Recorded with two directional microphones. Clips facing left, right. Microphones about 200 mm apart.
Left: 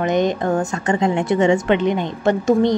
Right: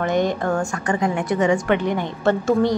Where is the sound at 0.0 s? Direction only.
20° left (ahead or behind).